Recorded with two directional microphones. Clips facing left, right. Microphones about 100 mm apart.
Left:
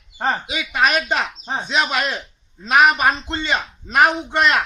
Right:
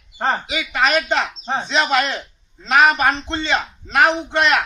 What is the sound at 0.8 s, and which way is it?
A man's voice, 10° left (ahead or behind).